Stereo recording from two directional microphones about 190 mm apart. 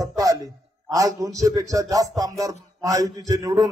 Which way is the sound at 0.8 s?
20° right (ahead or behind).